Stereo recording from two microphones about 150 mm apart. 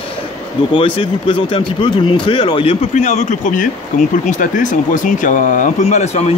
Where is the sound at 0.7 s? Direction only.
35° left (ahead or behind).